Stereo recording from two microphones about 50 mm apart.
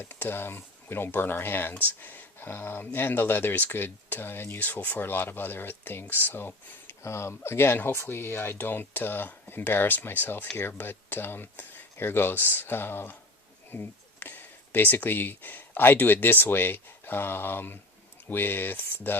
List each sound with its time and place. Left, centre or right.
0.0 s speech: left
7.0 s speech: left